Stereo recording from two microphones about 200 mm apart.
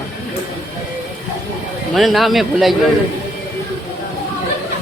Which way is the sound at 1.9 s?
Centre (ahead or behind).